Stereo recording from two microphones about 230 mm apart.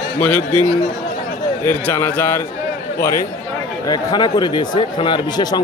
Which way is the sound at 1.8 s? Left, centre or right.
Centre.